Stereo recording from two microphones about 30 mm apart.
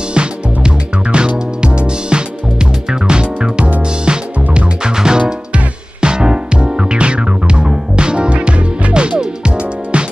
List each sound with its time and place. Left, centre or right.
0.1 s music: right